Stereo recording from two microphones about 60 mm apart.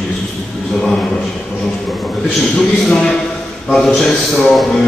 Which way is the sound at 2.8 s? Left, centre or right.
Centre.